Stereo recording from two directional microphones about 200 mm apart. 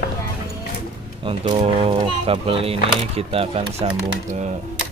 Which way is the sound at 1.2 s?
30° right (ahead or behind).